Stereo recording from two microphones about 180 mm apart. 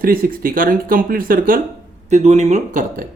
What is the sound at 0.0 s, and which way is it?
Speech, 55° right (ahead or behind).